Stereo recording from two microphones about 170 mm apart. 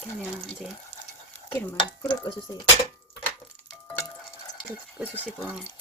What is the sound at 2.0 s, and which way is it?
Speech, 25° left (ahead or behind).